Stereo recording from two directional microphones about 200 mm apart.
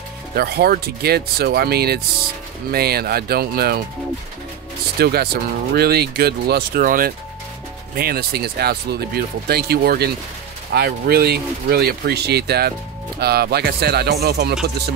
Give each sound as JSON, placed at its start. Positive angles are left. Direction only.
{"t": 0.4, "sound": "speech", "side_deg": -50}
{"t": 4.9, "sound": "speech", "side_deg": -50}